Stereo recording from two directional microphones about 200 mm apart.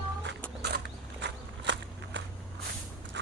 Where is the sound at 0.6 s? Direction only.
55° right (ahead or behind).